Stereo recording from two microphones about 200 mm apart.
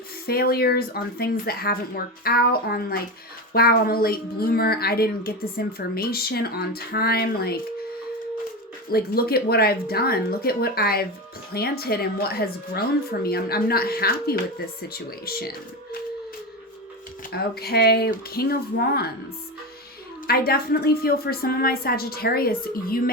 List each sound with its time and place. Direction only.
0.3 s speech: 50° left (ahead or behind)
8.9 s speech: 50° left (ahead or behind)
17.3 s speech: 50° left (ahead or behind)
20.2 s speech: 50° left (ahead or behind)